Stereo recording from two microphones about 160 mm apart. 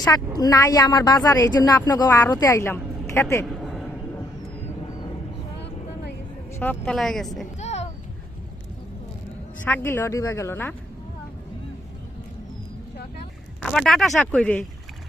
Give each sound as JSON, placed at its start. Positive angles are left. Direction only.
{"t": 0.3, "sound": "a woman's voice", "side_deg": 20}
{"t": 3.4, "sound": "a sound", "side_deg": 0}
{"t": 6.6, "sound": "speech", "side_deg": 10}
{"t": 7.6, "sound": "a sound", "side_deg": 45}
{"t": 9.6, "sound": "a woman's voice", "side_deg": 10}
{"t": 13.6, "sound": "speech", "side_deg": 0}